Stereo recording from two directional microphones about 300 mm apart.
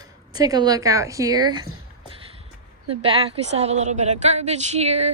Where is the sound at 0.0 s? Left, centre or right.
Centre.